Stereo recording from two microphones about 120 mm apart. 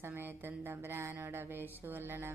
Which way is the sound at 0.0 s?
20° right (ahead or behind).